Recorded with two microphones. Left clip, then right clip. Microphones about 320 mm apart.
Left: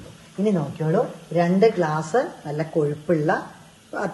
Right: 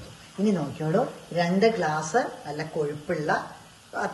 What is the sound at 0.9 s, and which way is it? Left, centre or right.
Speech, centre.